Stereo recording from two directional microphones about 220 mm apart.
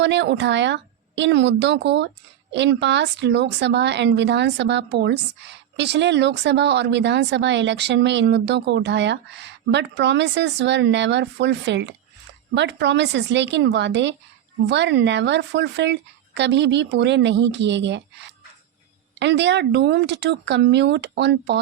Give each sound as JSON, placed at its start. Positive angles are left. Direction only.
{"t": 0.0, "sound": "speech", "side_deg": -55}